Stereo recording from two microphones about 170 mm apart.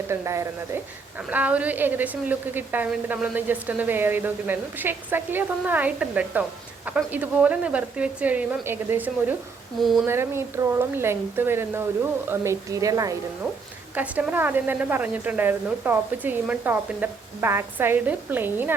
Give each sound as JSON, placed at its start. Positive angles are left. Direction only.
{"t": 0.1, "sound": "a woman's voice", "side_deg": -15}
{"t": 13.9, "sound": "a woman's voice", "side_deg": -10}